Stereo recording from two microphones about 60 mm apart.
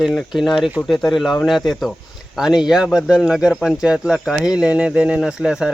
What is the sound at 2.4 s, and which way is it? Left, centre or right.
Speech, centre.